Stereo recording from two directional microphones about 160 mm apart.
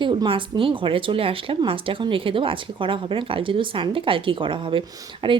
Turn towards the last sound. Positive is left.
turn(degrees=-30)  # may be behind; listen again after turning